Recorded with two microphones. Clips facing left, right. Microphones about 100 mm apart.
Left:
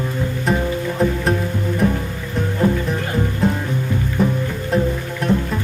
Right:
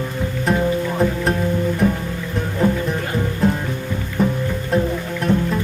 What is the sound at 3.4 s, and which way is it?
Music, centre (ahead or behind).